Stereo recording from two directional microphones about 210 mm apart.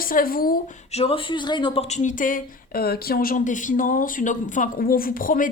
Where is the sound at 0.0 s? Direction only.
45° left (ahead or behind).